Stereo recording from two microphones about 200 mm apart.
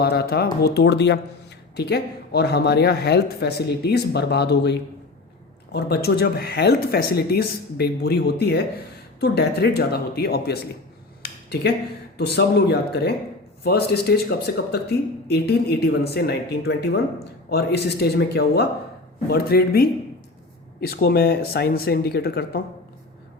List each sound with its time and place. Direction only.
0.0 s speech: 50° left (ahead or behind)
11.2 s a sound: 50° left (ahead or behind)
12.1 s speech: 55° left (ahead or behind)